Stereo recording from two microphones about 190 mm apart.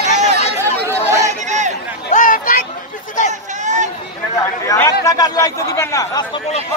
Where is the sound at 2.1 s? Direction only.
45° left (ahead or behind).